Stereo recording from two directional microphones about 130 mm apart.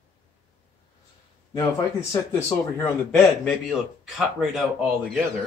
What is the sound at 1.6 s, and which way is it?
A man's voice, 25° left (ahead or behind).